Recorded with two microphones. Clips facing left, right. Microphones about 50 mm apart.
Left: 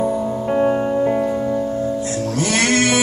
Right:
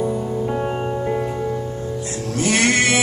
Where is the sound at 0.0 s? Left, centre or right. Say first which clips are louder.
Left 2 dB; left.